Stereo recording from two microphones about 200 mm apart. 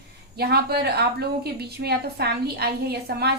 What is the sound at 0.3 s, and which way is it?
A woman's voice, 50° right (ahead or behind).